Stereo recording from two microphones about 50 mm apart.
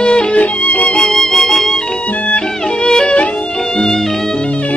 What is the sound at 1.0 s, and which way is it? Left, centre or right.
Music, centre.